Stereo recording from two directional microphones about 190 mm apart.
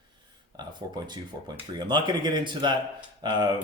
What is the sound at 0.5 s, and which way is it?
Speech, 20° right (ahead or behind).